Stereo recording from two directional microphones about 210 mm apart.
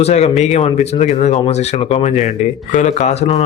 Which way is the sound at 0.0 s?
30° left (ahead or behind).